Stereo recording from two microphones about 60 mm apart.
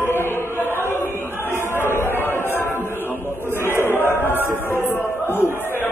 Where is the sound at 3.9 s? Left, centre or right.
Left.